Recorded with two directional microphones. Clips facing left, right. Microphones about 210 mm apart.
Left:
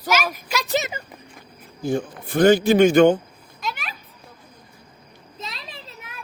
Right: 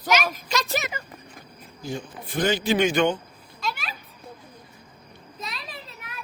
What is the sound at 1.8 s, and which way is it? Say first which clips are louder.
Speech: left 9 dB; 55° left (ahead or behind).